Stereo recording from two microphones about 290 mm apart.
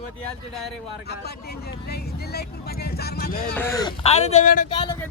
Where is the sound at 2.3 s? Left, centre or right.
Left.